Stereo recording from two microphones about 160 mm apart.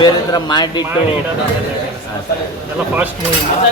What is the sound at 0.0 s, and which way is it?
Speech, 25° left (ahead or behind).